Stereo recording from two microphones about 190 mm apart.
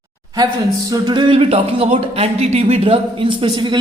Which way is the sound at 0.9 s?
20° right (ahead or behind).